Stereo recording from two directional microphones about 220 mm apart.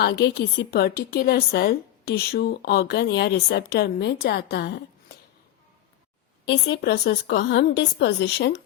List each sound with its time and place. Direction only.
0.0 s a woman's voice: 50° left (ahead or behind)
6.4 s a woman's voice: 50° left (ahead or behind)